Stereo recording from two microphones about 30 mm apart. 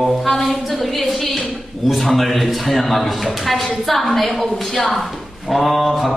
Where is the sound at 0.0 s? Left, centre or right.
Centre.